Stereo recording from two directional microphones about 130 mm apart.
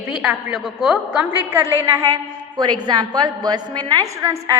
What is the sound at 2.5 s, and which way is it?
A woman's voice, 35° right (ahead or behind).